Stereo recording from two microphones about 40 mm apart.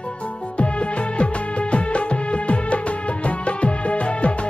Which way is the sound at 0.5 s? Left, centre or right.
Left.